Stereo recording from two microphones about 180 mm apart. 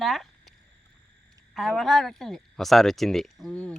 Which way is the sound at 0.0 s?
Centre (ahead or behind).